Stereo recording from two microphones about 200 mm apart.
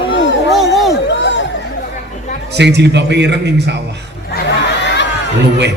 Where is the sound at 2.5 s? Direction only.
60° right (ahead or behind).